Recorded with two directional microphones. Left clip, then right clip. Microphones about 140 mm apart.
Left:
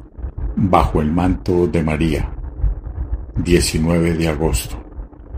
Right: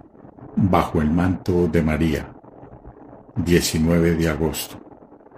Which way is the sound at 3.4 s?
25° left (ahead or behind).